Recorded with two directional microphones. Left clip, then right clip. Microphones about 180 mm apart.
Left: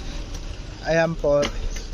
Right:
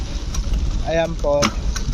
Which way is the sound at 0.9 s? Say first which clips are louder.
Even; 30° left (ahead or behind).